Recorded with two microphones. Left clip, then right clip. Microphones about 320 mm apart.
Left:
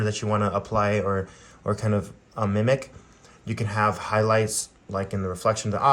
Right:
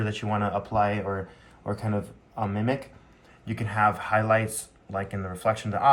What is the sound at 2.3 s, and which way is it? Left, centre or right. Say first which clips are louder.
Speech: left 5 dB; left.